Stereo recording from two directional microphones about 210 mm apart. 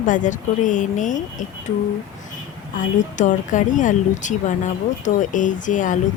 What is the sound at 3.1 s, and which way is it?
Speech, 35° left (ahead or behind).